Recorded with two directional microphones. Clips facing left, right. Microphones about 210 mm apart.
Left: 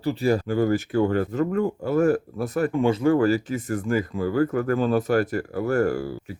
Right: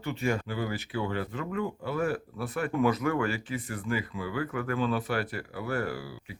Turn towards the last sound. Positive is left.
turn(degrees=45)  # may be behind; listen again after turning